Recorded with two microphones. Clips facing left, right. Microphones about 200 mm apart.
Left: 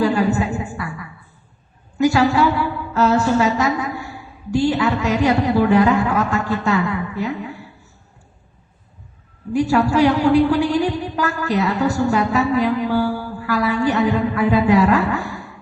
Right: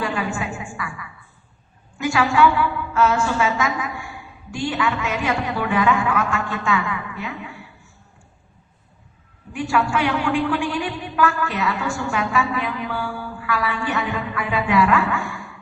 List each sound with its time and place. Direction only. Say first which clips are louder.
0.0 s a sound: left 8 dB; 40° left (ahead or behind)
2.0 s a woman's voice: left 3 dB; 40° left (ahead or behind)
9.5 s a man's voice: left 5 dB; 40° left (ahead or behind)